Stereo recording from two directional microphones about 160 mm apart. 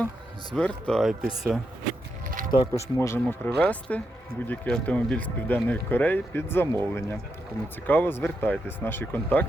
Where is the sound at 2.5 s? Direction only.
25° left (ahead or behind).